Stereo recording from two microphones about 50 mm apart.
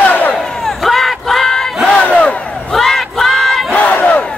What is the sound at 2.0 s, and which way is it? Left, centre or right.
Battle cry, left.